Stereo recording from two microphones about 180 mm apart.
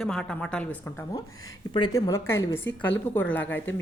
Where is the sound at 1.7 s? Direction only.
25° left (ahead or behind).